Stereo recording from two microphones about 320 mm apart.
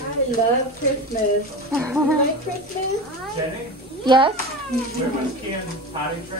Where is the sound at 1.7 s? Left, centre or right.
Centre.